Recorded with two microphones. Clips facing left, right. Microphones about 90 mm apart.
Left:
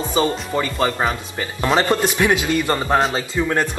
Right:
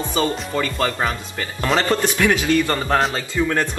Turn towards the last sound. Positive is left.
turn(degrees=15)  # may be behind; listen again after turning